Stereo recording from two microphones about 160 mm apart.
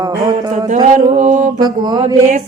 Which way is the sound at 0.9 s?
45° right (ahead or behind).